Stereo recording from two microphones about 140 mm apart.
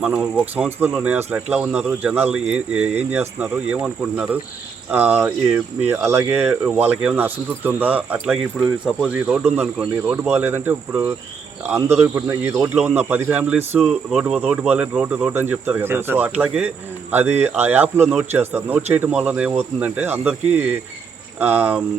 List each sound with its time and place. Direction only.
0.0 s speech: 5° right (ahead or behind)
6.4 s speech: 5° right (ahead or behind)
12.7 s speech: 10° right (ahead or behind)
13.7 s speech: centre (ahead or behind)